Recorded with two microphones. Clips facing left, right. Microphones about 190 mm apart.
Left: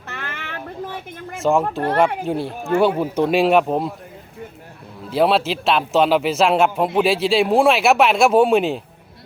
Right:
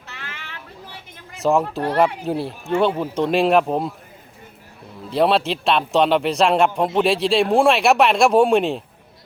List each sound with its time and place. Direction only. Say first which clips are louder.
0.1 s music: left 7 dB; 55° left (ahead or behind)
1.4 s a man's voice: left 1 dB; centre (ahead or behind)
5.1 s a man's voice: left 1 dB; centre (ahead or behind)